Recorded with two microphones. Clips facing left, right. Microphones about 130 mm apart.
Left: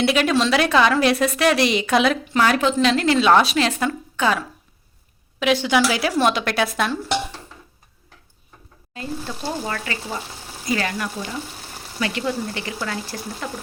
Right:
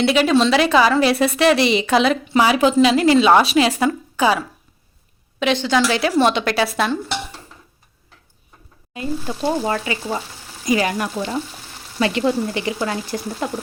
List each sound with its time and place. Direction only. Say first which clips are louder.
0.0 s a woman's voice: right 3 dB; centre (ahead or behind)
5.4 s a woman's voice: right 1 dB; 5° left (ahead or behind)
8.9 s speech: right 4 dB; 15° right (ahead or behind)